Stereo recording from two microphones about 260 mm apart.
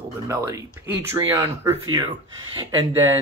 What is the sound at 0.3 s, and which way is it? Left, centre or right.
Speech, centre.